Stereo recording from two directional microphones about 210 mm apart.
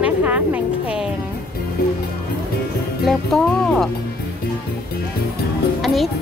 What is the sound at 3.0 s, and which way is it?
Speech, centre (ahead or behind).